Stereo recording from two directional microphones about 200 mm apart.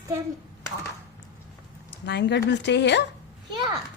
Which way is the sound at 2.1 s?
60° left (ahead or behind).